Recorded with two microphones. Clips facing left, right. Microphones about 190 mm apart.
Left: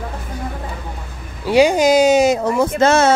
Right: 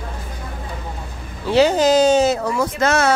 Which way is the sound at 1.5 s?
10° left (ahead or behind).